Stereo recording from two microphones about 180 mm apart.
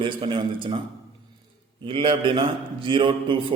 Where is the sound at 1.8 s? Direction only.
30° right (ahead or behind).